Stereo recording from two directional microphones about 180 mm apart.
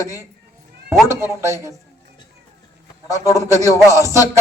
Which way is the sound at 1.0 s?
15° right (ahead or behind).